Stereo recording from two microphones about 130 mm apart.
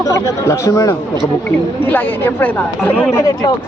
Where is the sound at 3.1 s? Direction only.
30° left (ahead or behind).